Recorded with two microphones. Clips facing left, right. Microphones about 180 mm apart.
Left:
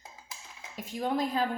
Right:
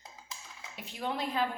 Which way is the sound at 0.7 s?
45° left (ahead or behind).